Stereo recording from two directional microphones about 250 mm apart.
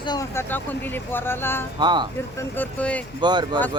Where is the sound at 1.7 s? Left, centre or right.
Centre.